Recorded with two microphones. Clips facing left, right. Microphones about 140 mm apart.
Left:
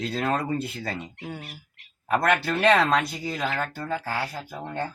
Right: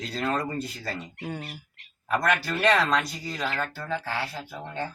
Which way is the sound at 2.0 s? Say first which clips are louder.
Left 3 dB; 55° left (ahead or behind).